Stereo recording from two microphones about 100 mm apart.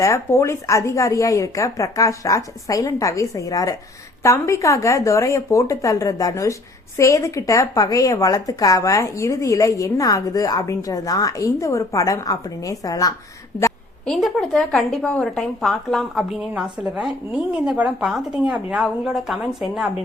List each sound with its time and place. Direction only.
0.0 s speech: 30° left (ahead or behind)
14.0 s a woman's voice: 10° left (ahead or behind)